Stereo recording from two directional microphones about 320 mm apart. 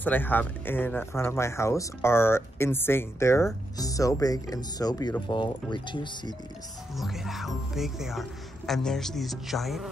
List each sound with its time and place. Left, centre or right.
0.0 s speech: centre
7.0 s speech: centre